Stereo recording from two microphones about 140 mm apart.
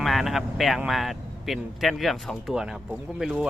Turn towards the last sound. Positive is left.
turn(degrees=-5)  # may be behind; listen again after turning